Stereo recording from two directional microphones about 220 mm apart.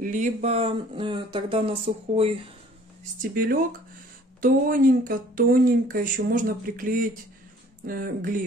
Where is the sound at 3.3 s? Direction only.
40° right (ahead or behind).